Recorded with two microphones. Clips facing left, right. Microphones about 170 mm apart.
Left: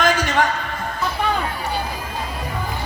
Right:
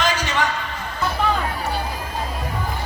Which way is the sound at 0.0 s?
50° left (ahead or behind).